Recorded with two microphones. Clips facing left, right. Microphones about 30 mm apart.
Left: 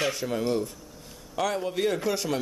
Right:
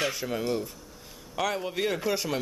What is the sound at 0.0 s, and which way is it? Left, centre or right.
Speech, centre.